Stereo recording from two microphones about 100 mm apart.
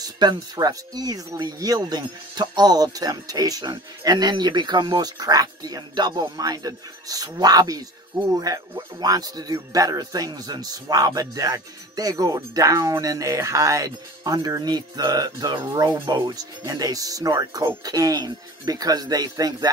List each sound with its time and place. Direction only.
0.0 s speech: 45° right (ahead or behind)